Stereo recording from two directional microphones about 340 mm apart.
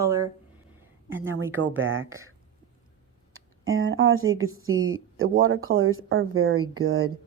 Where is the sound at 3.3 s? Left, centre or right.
Right.